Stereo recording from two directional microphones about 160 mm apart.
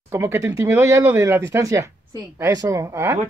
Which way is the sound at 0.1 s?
15° right (ahead or behind).